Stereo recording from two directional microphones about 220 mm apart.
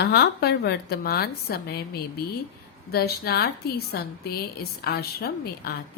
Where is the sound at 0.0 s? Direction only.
50° left (ahead or behind).